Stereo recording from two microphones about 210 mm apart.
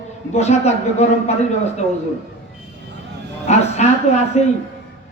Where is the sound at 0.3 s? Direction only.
30° left (ahead or behind).